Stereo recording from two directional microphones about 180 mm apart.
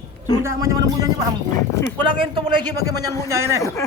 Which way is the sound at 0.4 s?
20° right (ahead or behind).